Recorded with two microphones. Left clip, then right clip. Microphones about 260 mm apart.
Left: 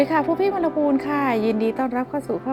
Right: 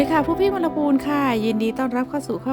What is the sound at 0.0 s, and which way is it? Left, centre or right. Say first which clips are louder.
Speech: right 1 dB; centre.